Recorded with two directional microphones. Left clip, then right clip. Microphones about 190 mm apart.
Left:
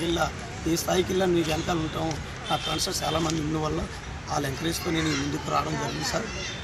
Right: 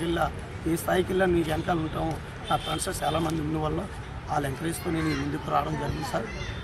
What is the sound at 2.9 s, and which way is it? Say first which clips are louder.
Speech: right 2 dB; 10° right (ahead or behind).